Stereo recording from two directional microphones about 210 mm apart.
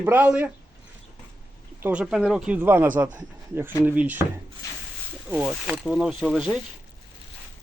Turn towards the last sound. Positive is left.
turn(degrees=-5)  # may be behind; listen again after turning